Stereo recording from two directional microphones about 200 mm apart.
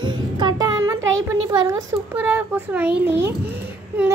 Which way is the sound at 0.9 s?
70° right (ahead or behind).